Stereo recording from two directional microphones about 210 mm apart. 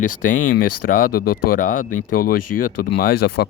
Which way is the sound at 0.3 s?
40° left (ahead or behind).